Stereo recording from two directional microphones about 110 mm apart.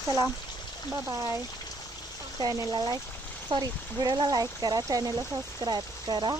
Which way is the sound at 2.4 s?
35° right (ahead or behind).